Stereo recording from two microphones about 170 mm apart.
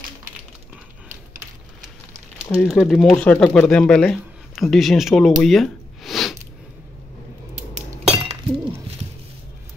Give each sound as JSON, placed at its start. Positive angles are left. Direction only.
{"t": 2.7, "sound": "speech", "side_deg": 0}
{"t": 8.1, "sound": "chink", "side_deg": -35}